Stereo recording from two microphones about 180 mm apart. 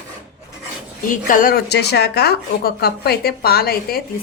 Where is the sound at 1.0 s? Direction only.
50° left (ahead or behind).